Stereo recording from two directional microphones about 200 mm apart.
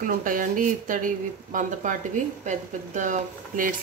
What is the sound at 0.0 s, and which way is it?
Speech, 40° right (ahead or behind).